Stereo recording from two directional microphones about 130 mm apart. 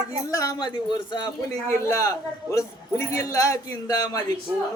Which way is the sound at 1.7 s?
20° left (ahead or behind).